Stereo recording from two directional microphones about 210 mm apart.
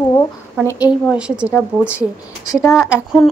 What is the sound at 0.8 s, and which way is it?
Speech, 5° right (ahead or behind).